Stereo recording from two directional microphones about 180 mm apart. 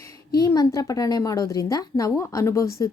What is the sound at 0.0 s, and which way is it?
A woman's voice, 20° left (ahead or behind).